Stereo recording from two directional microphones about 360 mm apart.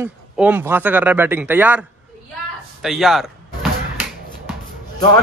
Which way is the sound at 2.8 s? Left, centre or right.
Centre.